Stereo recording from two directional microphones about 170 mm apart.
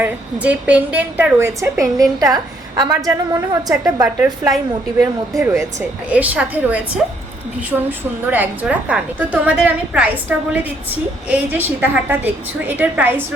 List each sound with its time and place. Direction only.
0.0 s a woman's voice: 10° right (ahead or behind)
6.1 s a woman's voice: 10° right (ahead or behind)